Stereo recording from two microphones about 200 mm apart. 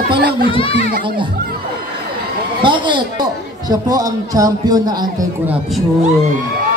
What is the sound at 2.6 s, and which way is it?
A man's voice, 25° right (ahead or behind).